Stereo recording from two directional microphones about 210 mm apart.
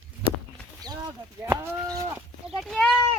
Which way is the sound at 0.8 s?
20° right (ahead or behind).